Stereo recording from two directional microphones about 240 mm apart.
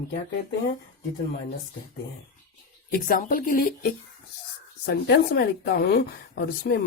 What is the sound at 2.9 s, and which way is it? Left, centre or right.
Speech, left.